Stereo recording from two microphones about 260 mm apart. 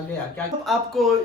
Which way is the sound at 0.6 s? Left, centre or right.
Centre.